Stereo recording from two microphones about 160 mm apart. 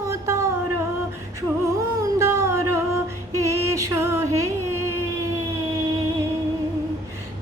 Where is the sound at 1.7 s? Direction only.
20° right (ahead or behind).